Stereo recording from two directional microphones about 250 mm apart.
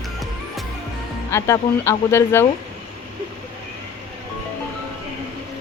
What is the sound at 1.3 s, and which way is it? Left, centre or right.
Speech, centre.